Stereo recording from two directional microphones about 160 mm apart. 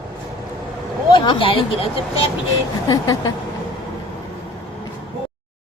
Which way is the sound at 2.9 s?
20° left (ahead or behind).